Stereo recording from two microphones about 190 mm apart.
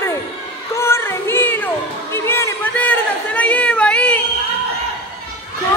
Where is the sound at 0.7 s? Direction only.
15° left (ahead or behind).